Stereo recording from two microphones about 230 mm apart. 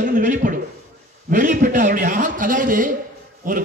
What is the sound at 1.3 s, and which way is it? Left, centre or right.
A man's voice, right.